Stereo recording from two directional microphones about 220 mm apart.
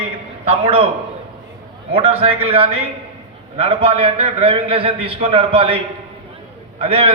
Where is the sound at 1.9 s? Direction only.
25° right (ahead or behind).